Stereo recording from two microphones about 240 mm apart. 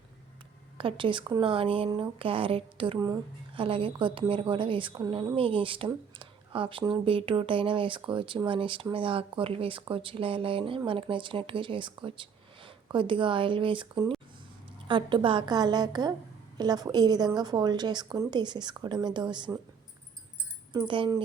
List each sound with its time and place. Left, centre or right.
0.8 s a woman's voice: right
20.7 s speech: centre